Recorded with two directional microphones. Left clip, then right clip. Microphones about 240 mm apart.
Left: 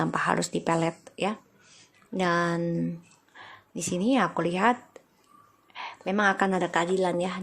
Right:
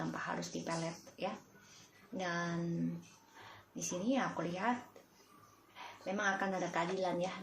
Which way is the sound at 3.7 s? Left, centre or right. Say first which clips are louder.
Left 11 dB; left.